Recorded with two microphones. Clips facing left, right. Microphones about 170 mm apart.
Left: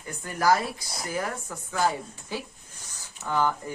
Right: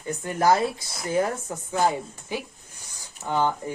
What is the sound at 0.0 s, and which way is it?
Speech, 25° right (ahead or behind).